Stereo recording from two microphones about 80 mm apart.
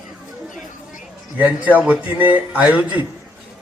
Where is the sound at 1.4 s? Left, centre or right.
Right.